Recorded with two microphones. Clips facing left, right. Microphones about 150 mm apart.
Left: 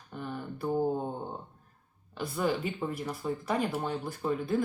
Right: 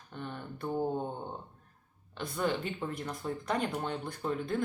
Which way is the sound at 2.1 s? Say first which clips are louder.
Left 2 dB; 5° left (ahead or behind).